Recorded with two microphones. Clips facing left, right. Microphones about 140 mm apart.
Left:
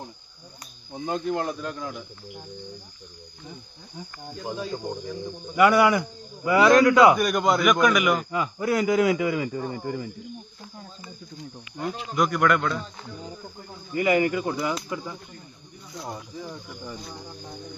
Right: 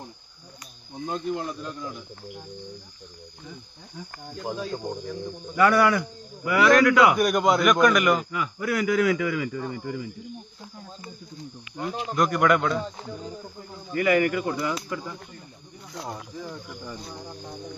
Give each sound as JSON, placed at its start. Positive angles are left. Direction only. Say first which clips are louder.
{"t": 0.9, "sound": "speech", "louder": "left 2 dB", "side_deg": 70}
{"t": 4.4, "sound": "a man's voice", "louder": "even", "side_deg": 5}
{"t": 5.5, "sound": "a man's voice", "louder": "left 1 dB", "side_deg": 15}
{"t": 7.2, "sound": "a man's voice", "louder": "right 1 dB", "side_deg": 0}
{"t": 8.3, "sound": "a man's voice", "louder": "left 3 dB", "side_deg": 30}
{"t": 12.1, "sound": "a man's voice", "louder": "right 1 dB", "side_deg": 0}
{"t": 13.9, "sound": "a man's voice", "louder": "even", "side_deg": 20}